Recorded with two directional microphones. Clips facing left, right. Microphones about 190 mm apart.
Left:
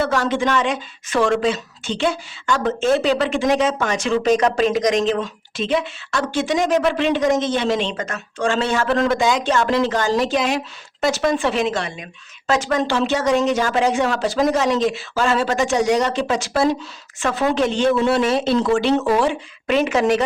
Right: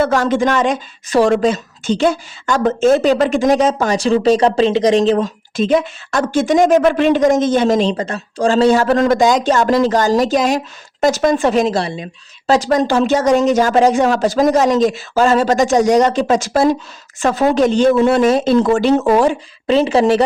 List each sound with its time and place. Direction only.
0.0 s a woman's voice: 45° right (ahead or behind)
19.6 s a woman's voice: 30° right (ahead or behind)